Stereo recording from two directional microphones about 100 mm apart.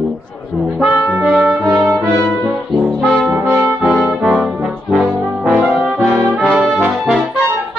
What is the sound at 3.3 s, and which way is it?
Brass instrument, 20° right (ahead or behind).